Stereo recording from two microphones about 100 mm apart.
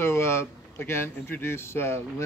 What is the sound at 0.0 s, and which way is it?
Speech, 25° left (ahead or behind).